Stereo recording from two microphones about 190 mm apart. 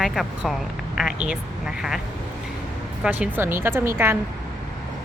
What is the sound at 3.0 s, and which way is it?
Speech, 5° right (ahead or behind).